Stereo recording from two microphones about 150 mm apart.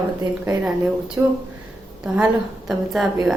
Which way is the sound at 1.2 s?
15° right (ahead or behind).